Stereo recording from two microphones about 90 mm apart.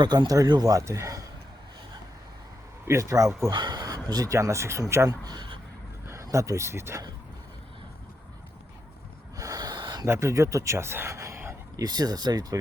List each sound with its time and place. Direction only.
0.0 s speech: 55° right (ahead or behind)
0.7 s speech: 35° right (ahead or behind)
2.8 s speech: 35° right (ahead or behind)
3.5 s speech: 55° right (ahead or behind)
4.3 s speech: 35° right (ahead or behind)
5.0 s speech: 50° right (ahead or behind)
6.2 s speech: 35° right (ahead or behind)
9.4 s snort: 45° right (ahead or behind)
10.1 s speech: 35° right (ahead or behind)
11.8 s speech: 50° right (ahead or behind)